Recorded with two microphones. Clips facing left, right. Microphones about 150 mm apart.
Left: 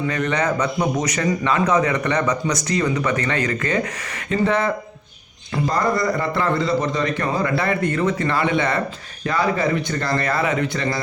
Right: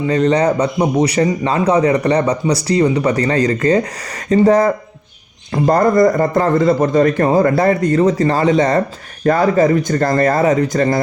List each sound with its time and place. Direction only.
0.1 s a man's voice: 30° right (ahead or behind)